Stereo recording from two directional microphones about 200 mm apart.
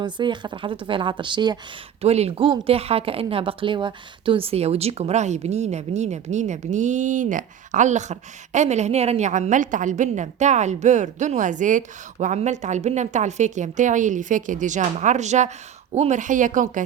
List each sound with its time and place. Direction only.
0.0 s speech: 20° right (ahead or behind); by 16.8 s 40° right (ahead or behind)